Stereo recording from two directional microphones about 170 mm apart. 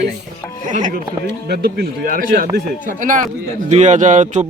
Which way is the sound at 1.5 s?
70° right (ahead or behind).